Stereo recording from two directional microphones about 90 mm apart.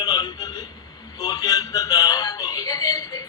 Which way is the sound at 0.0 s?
50° left (ahead or behind).